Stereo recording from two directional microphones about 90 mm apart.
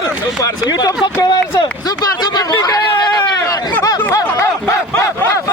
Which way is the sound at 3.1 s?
50° left (ahead or behind).